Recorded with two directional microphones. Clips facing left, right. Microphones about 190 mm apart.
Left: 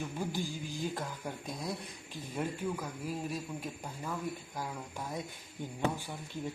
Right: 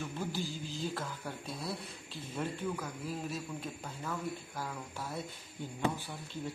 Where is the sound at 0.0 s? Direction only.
15° left (ahead or behind).